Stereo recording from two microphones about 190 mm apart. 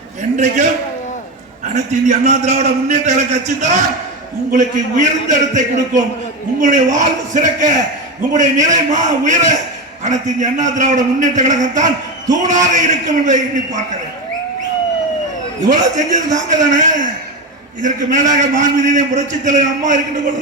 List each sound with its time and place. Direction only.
0.2 s a sound: 40° right (ahead or behind)
1.6 s a man's voice: 40° right (ahead or behind)
15.6 s a man's voice: 40° right (ahead or behind)